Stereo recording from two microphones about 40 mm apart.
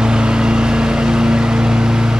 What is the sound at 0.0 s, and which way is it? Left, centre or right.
Vehicle, right.